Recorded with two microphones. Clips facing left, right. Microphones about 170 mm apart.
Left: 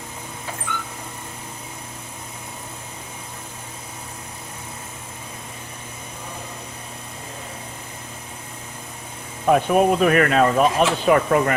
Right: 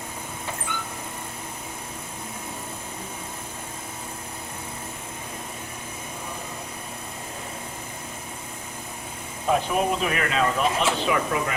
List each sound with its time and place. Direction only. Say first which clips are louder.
9.5 s speech: left 6 dB; 55° left (ahead or behind)